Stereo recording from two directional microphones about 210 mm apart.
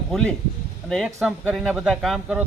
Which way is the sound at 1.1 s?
10° right (ahead or behind).